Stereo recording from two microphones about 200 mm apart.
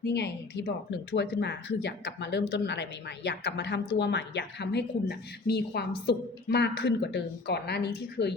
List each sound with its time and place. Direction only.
0.0 s a woman's voice: 60° left (ahead or behind)